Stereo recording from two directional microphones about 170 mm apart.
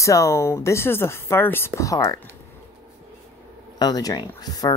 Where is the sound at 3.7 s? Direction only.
25° left (ahead or behind).